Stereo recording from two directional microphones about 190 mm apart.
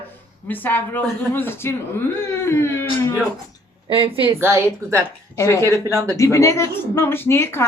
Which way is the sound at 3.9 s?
30° right (ahead or behind).